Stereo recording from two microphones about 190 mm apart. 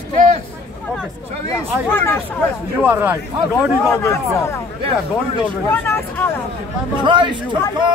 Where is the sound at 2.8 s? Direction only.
10° right (ahead or behind).